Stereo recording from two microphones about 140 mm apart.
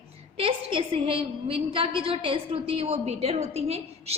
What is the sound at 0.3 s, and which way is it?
A woman's voice, 40° right (ahead or behind).